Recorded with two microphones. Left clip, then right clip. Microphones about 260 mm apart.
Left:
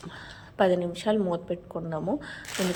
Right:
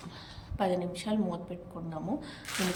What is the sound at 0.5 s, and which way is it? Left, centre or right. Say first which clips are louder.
A woman's voice: left 7 dB; centre.